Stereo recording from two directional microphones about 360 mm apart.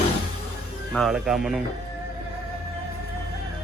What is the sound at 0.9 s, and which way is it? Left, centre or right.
Speech, centre.